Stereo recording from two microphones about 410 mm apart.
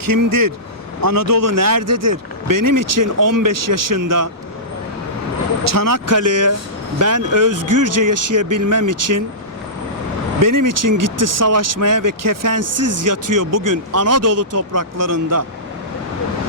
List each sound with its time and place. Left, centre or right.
0.0 s speech: right
5.7 s speech: right
10.4 s speech: right